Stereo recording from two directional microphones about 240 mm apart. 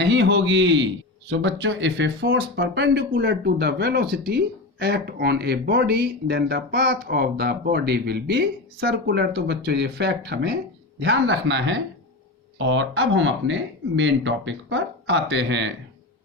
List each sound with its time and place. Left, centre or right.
0.0 s speech: right